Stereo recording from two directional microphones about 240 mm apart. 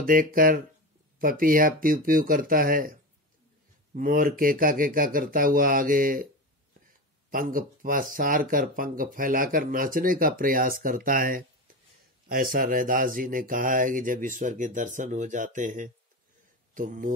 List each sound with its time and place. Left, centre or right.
0.0 s speech: right
7.2 s speech: right